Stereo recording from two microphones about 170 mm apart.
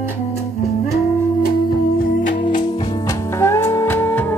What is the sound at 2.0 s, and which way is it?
Music, 60° left (ahead or behind).